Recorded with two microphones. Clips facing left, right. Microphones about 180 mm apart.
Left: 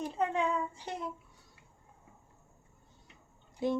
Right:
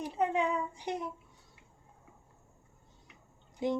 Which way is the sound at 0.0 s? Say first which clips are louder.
Right 1 dB; 10° right (ahead or behind).